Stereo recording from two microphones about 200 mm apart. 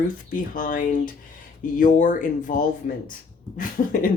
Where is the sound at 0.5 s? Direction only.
40° left (ahead or behind).